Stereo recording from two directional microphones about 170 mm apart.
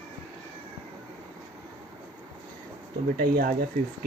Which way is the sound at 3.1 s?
60° right (ahead or behind).